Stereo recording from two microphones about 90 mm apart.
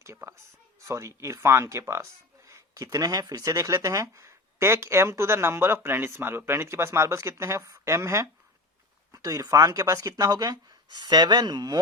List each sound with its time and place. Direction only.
0.0 s speech: 30° right (ahead or behind)
9.1 s speech: 40° right (ahead or behind)